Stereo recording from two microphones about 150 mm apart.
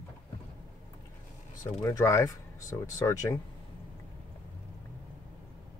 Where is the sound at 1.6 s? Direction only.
20° left (ahead or behind).